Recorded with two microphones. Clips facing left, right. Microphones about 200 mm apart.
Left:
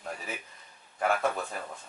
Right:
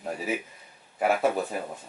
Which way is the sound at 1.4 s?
20° right (ahead or behind).